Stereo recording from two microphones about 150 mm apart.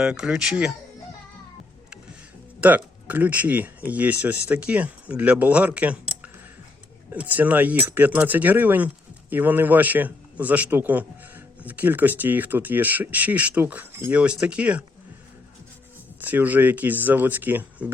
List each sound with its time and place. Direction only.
0.0 s speech: 5° right (ahead or behind)
2.6 s a man's voice: 10° right (ahead or behind)
16.2 s a man's voice: 10° right (ahead or behind)